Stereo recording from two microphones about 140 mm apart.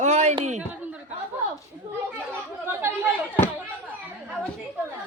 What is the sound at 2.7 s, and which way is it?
Chatter, 15° right (ahead or behind).